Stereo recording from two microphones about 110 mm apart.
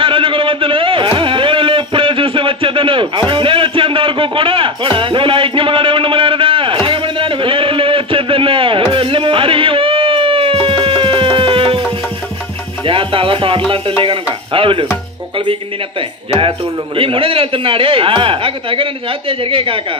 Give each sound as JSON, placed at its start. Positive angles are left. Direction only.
{"t": 0.0, "sound": "a sound", "side_deg": -50}
{"t": 10.7, "sound": "music", "side_deg": -55}
{"t": 12.8, "sound": "music", "side_deg": -55}
{"t": 14.0, "sound": "speech", "side_deg": -55}
{"t": 16.3, "sound": "speech", "side_deg": -55}